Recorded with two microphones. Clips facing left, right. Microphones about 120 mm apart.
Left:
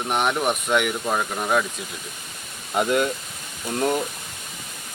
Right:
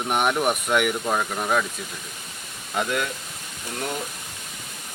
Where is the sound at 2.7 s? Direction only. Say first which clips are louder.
Left 5 dB; 25° left (ahead or behind).